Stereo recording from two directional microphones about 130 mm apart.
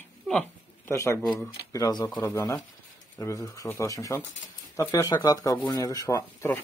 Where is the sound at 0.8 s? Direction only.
20° left (ahead or behind).